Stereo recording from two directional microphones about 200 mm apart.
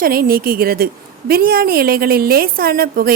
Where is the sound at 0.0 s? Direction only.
45° right (ahead or behind).